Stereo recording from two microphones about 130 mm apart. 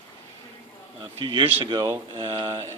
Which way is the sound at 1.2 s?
35° right (ahead or behind).